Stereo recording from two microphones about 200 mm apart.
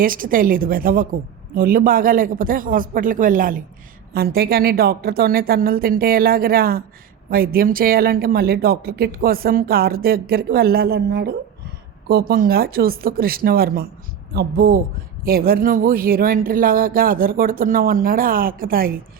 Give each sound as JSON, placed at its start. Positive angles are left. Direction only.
{"t": 0.0, "sound": "speech", "side_deg": -45}